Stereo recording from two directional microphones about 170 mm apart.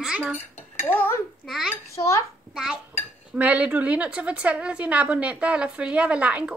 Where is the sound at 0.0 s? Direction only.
5° right (ahead or behind).